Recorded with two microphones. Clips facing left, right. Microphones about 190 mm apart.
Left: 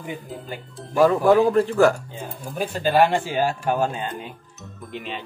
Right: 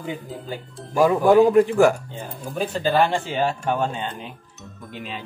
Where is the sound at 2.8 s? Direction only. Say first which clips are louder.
Left 2 dB; 10° left (ahead or behind).